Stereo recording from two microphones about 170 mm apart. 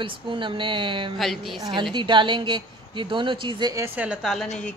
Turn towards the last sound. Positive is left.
turn(degrees=0)  # may be behind; listen again after turning